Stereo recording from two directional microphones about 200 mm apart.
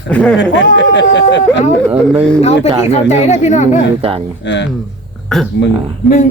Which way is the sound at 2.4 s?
30° left (ahead or behind).